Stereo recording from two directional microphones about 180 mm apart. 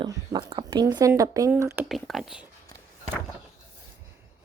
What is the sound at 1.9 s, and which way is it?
Speech, centre (ahead or behind).